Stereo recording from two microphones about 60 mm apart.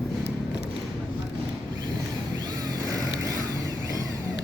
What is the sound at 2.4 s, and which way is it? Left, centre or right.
Vehicle, right.